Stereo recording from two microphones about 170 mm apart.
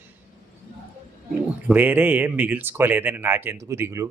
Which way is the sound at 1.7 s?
10° right (ahead or behind).